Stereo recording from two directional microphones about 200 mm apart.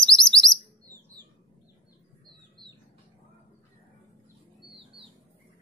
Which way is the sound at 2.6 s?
20° right (ahead or behind).